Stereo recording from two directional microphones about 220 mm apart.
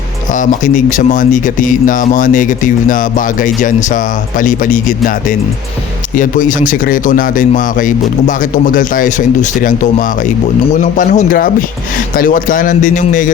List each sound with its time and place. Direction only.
0.3 s speech: 35° left (ahead or behind)